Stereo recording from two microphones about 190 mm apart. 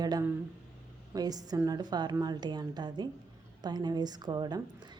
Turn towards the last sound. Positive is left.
turn(degrees=-20)  # may be behind; listen again after turning